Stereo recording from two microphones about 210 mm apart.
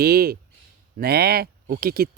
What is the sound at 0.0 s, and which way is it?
Speech, 45° right (ahead or behind).